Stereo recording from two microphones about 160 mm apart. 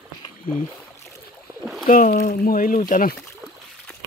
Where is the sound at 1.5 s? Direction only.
20° right (ahead or behind).